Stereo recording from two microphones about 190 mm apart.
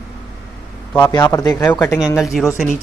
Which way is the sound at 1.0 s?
20° left (ahead or behind).